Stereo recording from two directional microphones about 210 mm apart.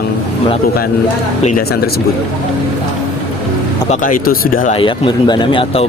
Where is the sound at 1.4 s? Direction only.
40° left (ahead or behind).